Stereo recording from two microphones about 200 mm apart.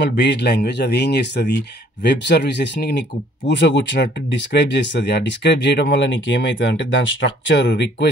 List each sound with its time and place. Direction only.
0.2 s speech: 55° left (ahead or behind)